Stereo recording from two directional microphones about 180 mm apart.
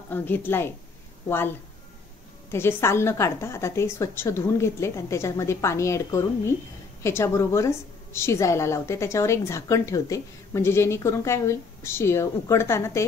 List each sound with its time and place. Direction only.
0.1 s a woman's voice: 10° left (ahead or behind)
2.5 s a woman's voice: 15° left (ahead or behind)